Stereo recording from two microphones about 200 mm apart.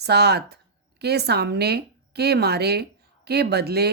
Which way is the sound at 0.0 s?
55° right (ahead or behind).